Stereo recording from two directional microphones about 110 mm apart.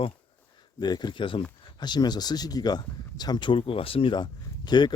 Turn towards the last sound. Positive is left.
turn(degrees=40)  # may be behind; listen again after turning